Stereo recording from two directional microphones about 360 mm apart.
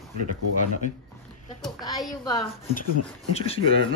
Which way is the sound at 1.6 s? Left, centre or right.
Centre.